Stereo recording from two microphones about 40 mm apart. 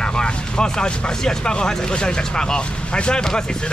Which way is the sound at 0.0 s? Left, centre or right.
Left.